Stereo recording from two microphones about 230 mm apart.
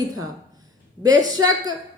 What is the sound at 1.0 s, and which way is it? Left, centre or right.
Speech, centre.